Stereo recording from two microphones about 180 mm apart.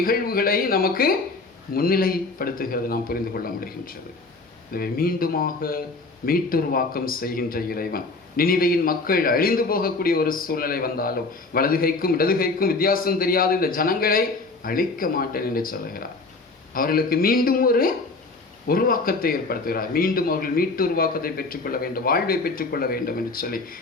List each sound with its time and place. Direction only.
0.0 s a man's voice: 55° left (ahead or behind)